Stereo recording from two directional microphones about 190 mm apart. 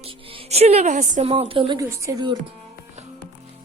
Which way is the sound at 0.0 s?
30° right (ahead or behind).